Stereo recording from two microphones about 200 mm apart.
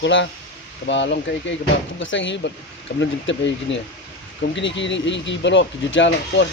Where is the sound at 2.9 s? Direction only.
55° left (ahead or behind).